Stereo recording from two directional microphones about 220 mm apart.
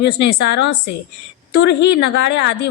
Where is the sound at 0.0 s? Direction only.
50° left (ahead or behind).